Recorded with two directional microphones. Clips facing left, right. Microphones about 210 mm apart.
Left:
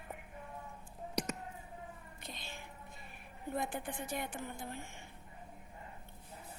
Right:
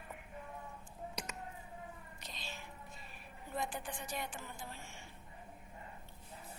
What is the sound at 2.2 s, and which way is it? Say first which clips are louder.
Music: left 1 dB; 55° left (ahead or behind).